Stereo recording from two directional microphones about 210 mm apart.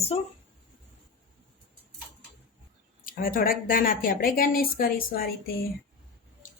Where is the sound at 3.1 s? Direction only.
40° left (ahead or behind).